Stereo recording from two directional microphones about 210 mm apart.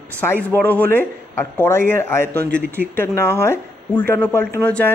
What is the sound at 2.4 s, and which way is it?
Speech, 55° right (ahead or behind).